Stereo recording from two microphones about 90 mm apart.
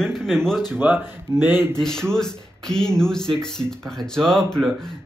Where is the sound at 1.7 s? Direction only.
5° left (ahead or behind).